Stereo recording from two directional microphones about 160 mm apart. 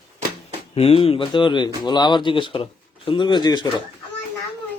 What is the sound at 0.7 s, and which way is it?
Speech, 35° left (ahead or behind).